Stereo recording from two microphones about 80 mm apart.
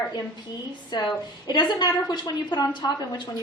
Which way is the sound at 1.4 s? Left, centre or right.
Left.